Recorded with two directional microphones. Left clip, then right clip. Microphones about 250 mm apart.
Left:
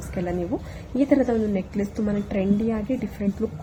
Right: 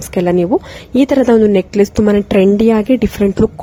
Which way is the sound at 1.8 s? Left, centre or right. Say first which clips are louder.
Right 16 dB; right.